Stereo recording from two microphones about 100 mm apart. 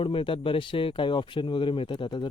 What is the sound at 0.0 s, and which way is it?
Speech, 60° left (ahead or behind).